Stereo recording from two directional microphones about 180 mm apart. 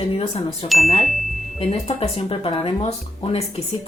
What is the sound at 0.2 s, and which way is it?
Speech, 35° left (ahead or behind).